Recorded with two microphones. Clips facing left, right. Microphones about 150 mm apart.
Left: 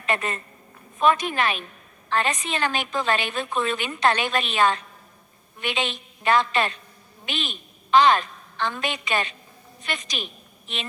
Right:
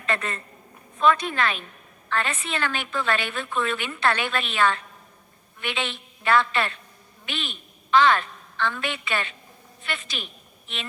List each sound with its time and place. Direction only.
0.0 s a woman's voice: 20° left (ahead or behind)